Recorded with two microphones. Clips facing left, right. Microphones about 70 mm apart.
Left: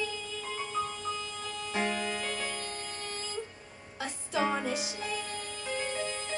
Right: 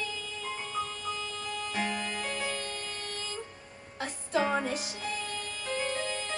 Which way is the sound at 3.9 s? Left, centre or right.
Right.